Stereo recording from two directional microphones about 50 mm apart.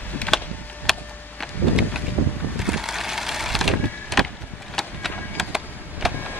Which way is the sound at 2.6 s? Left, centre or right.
Centre.